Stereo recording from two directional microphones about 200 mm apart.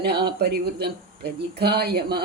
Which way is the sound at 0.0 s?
55° right (ahead or behind).